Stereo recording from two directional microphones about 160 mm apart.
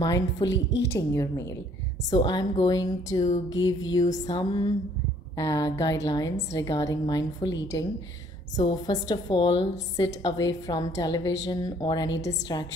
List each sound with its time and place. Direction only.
0.0 s a woman's voice: 20° left (ahead or behind)